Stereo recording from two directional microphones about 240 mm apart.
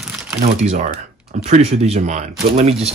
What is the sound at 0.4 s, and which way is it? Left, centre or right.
Speech, right.